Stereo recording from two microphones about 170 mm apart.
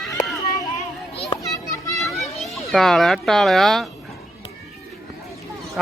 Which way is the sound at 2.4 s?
Centre (ahead or behind).